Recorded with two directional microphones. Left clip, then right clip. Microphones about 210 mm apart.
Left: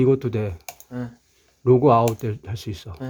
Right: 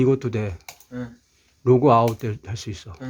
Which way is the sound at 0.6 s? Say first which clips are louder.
Left 1 dB; 30° left (ahead or behind).